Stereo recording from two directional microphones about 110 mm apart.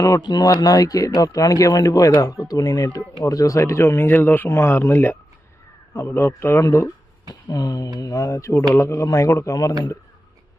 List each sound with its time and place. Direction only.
0.2 s a man's voice: 40° left (ahead or behind)